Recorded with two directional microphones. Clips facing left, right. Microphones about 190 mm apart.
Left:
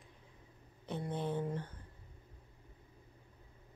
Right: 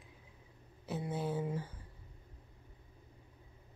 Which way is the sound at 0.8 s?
5° right (ahead or behind).